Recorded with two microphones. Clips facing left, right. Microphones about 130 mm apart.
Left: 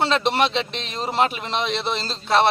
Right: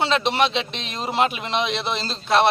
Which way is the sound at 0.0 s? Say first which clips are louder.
Even; centre (ahead or behind).